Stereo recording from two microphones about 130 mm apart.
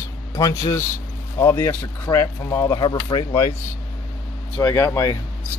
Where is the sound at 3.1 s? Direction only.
35° left (ahead or behind).